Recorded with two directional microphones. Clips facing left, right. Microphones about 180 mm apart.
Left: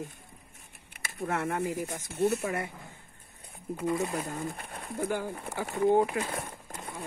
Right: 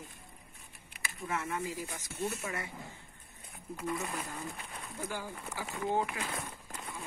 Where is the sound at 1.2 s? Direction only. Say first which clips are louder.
Left 6 dB; 60° left (ahead or behind).